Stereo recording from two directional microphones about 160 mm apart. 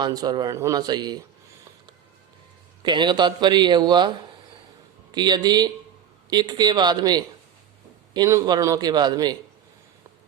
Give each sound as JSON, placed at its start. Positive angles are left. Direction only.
{"t": 0.0, "sound": "a man's voice", "side_deg": -25}
{"t": 2.8, "sound": "a man's voice", "side_deg": -30}
{"t": 5.1, "sound": "a man's voice", "side_deg": -25}